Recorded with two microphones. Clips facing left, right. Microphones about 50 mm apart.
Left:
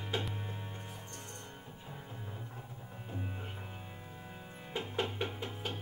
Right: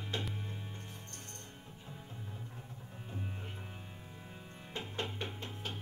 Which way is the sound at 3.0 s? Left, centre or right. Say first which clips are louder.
Left 2 dB; centre.